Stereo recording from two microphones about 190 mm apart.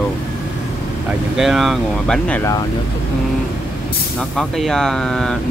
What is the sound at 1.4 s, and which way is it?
Speech, centre (ahead or behind).